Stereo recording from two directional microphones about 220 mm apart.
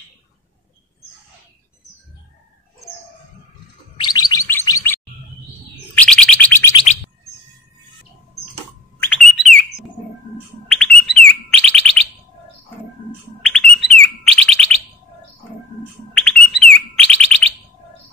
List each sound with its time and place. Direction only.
3.9 s bird: 20° left (ahead or behind)
5.9 s bird: 5° left (ahead or behind)
9.0 s bird: centre (ahead or behind)
13.4 s bird: 5° left (ahead or behind)
16.2 s bird: 5° left (ahead or behind)